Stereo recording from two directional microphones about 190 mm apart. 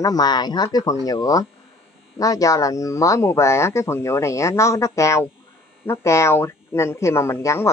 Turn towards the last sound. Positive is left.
turn(degrees=15)  # may be behind; listen again after turning